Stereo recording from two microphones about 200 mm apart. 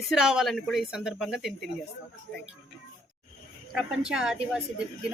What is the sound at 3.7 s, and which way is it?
Speech, 5° right (ahead or behind).